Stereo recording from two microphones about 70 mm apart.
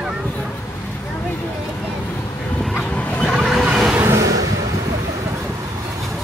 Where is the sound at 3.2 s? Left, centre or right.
Centre.